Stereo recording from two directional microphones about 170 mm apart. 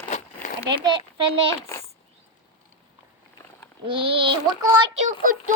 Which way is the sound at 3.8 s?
30° right (ahead or behind).